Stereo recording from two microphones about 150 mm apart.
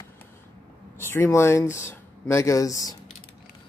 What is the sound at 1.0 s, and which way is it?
Speech, 15° left (ahead or behind).